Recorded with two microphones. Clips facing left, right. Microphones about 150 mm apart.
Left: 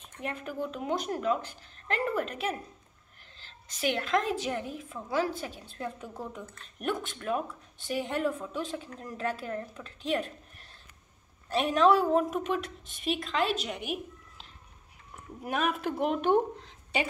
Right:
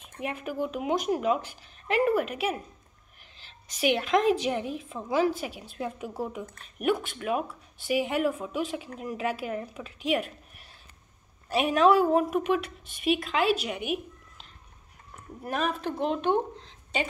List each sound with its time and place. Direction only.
0.0 s a woman's voice: 10° right (ahead or behind)
15.6 s speech: 30° right (ahead or behind)
16.5 s a sound: 25° right (ahead or behind)